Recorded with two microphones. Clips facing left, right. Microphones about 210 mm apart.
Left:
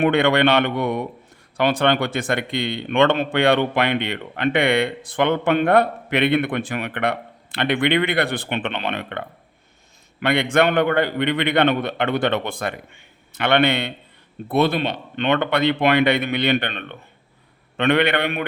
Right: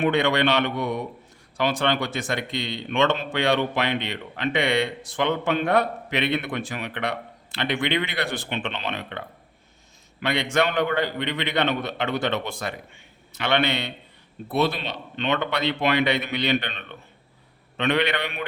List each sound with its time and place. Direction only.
0.0 s speech: 55° left (ahead or behind)